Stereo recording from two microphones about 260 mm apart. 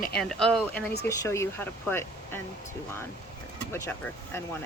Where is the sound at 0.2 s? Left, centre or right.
Centre.